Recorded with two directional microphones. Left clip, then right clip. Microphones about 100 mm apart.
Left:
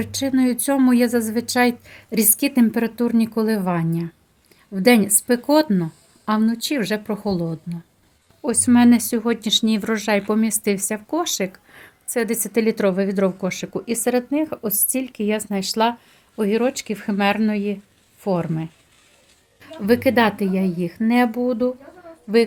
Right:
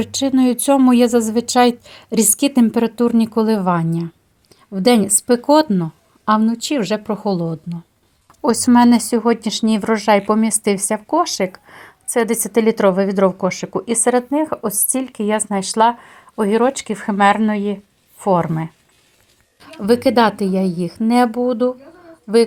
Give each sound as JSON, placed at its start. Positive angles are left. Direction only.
{"t": 0.0, "sound": "a woman's voice", "side_deg": -35}
{"t": 8.9, "sound": "a woman's voice", "side_deg": -20}
{"t": 19.8, "sound": "a woman's voice", "side_deg": -35}